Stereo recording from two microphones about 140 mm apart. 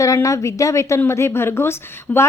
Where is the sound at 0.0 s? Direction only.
25° left (ahead or behind).